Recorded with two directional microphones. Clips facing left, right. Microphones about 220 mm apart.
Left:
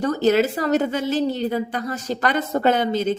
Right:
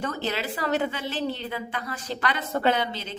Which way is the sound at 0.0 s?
40° left (ahead or behind).